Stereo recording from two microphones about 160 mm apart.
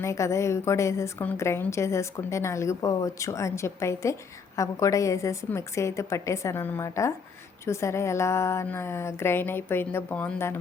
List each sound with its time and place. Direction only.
0.0 s a woman's voice: 20° left (ahead or behind)